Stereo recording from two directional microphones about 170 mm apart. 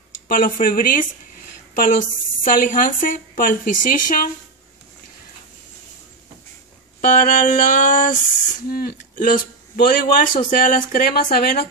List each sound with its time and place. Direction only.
0.3 s a woman's voice: 55° left (ahead or behind)
7.1 s a woman's voice: 55° left (ahead or behind)